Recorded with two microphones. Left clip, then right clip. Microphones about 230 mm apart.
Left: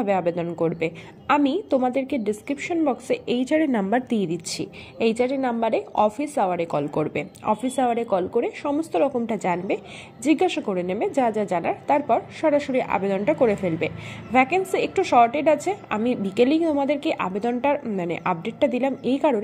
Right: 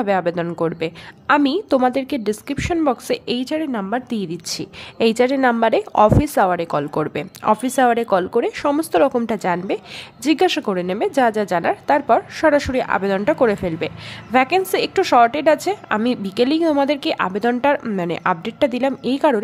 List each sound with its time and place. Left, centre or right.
0.0 s a woman's voice: right
3.5 s a woman's voice: centre
5.2 s a woman's voice: right